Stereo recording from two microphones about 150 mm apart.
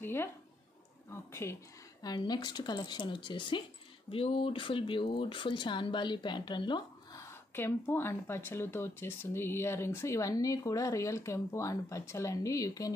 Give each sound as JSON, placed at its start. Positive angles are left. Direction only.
{"t": 0.0, "sound": "a sound", "side_deg": 15}
{"t": 1.1, "sound": "speech", "side_deg": 15}
{"t": 7.2, "sound": "speech", "side_deg": 15}